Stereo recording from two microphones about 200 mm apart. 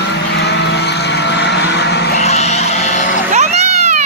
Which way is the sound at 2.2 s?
35° left (ahead or behind).